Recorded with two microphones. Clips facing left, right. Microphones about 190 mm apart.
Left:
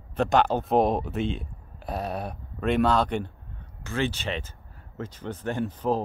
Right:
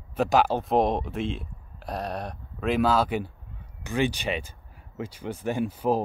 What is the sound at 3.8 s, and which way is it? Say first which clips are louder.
Speech: right 2 dB; 15° right (ahead or behind).